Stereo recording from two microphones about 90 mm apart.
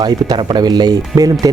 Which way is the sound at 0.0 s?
60° right (ahead or behind).